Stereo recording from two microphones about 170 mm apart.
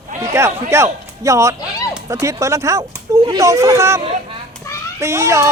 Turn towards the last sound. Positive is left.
turn(degrees=-15)  # may be behind; listen again after turning